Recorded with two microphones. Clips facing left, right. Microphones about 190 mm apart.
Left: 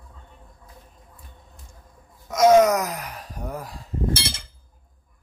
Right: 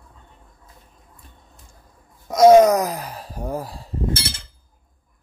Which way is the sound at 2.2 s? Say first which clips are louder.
Right 4 dB; 35° right (ahead or behind).